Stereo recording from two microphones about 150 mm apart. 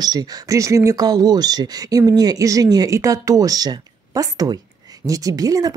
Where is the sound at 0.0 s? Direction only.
25° right (ahead or behind).